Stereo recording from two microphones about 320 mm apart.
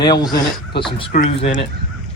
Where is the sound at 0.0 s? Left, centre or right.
Centre.